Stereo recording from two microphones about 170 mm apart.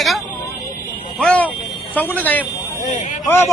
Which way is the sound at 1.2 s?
5° left (ahead or behind).